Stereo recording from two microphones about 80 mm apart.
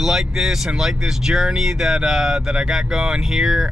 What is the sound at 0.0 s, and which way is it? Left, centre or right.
Speech, centre.